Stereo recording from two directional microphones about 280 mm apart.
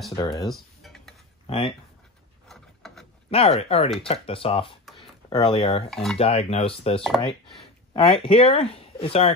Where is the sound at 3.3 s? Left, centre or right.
Left.